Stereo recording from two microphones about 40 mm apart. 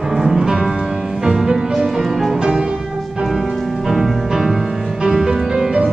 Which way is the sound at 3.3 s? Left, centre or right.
Centre.